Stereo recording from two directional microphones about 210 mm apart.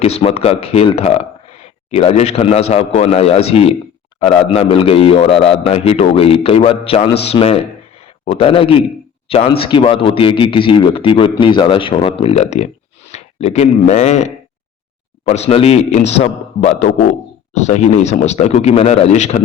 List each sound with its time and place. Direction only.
0.0 s a man's voice: 30° left (ahead or behind)